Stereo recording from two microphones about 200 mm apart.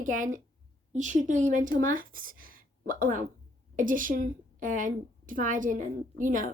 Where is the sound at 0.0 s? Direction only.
40° right (ahead or behind).